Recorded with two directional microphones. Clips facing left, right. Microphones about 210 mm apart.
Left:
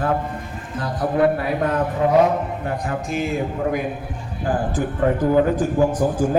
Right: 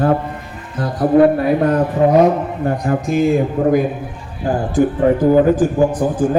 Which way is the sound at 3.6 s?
30° right (ahead or behind).